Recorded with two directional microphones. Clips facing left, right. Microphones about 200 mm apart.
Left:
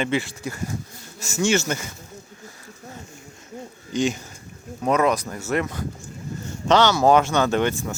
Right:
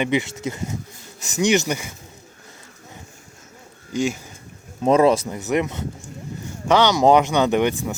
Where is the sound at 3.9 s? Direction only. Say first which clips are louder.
Even; 10° right (ahead or behind).